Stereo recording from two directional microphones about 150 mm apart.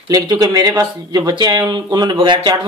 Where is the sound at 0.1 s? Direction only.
25° right (ahead or behind).